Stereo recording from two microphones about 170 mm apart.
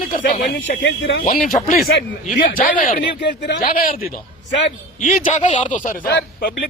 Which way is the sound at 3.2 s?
85° left.